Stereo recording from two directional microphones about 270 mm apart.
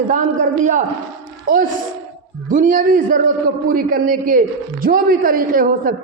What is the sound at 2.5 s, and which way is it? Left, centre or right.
A man's voice, right.